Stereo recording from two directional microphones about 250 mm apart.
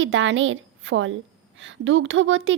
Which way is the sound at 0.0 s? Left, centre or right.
Right.